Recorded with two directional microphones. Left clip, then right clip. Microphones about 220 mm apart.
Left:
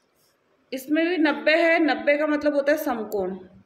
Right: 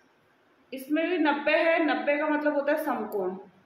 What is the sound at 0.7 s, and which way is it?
A woman's voice, 40° left (ahead or behind).